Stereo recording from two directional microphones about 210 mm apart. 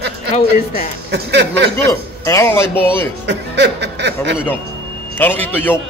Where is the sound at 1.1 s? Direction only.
55° right (ahead or behind).